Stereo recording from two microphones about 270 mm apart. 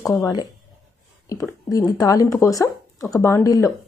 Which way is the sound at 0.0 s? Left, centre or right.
Centre.